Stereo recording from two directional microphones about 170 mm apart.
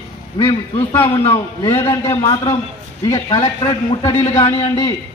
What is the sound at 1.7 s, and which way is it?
Speech, 15° left (ahead or behind).